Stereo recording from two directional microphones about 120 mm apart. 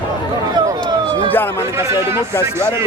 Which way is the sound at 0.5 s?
35° right (ahead or behind).